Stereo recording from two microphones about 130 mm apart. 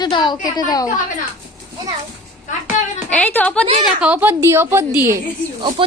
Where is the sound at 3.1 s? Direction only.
10° left (ahead or behind).